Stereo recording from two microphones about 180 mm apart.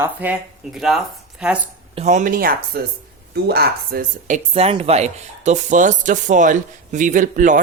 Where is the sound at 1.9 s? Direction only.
40° right (ahead or behind).